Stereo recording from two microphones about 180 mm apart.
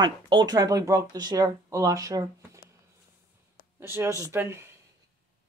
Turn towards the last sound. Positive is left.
turn(degrees=-15)  # may be behind; listen again after turning